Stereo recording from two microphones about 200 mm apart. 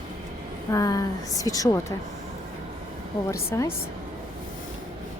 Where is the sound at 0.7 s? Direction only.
20° left (ahead or behind).